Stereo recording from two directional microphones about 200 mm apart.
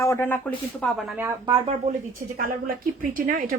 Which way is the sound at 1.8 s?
45° right (ahead or behind).